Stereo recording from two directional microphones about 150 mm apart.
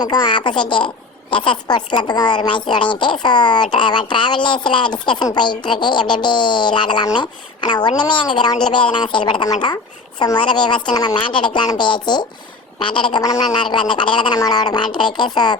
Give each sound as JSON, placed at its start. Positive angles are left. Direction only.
{"t": 0.0, "sound": "a woman's voice", "side_deg": 30}